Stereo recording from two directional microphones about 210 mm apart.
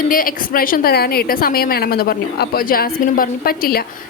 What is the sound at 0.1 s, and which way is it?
A woman's voice, 40° left (ahead or behind).